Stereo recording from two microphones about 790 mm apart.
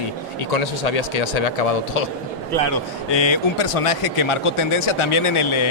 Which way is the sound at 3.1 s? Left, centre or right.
Left.